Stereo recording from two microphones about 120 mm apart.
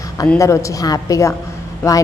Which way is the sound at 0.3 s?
25° left (ahead or behind).